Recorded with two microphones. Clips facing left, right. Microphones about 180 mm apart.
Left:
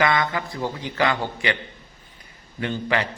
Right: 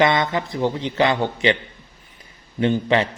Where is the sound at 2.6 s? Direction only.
20° right (ahead or behind).